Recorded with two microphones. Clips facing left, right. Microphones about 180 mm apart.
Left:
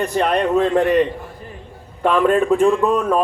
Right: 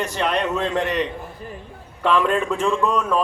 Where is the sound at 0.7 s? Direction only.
55° left (ahead or behind).